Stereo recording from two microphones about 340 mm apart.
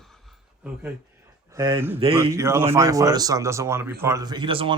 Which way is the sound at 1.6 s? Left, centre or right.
Centre.